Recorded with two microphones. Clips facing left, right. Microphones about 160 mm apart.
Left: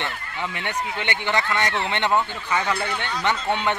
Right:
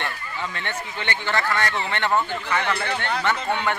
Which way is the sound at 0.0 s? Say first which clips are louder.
Left 1 dB; 15° left (ahead or behind).